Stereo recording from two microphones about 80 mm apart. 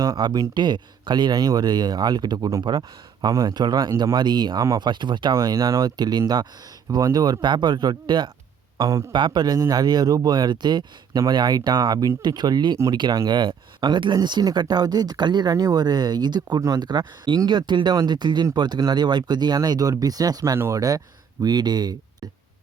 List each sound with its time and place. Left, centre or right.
0.2 s speech: right
0.5 s speech: right
5.3 s speech: right
5.8 s speech: right
8.8 s speech: right
9.1 s speech: right
13.2 s speech: right
16.6 s speech: right
16.8 s speech: right
21.4 s speech: right